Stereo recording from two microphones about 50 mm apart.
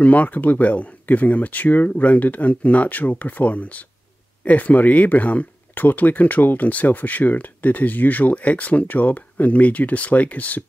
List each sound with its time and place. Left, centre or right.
0.0 s speech: left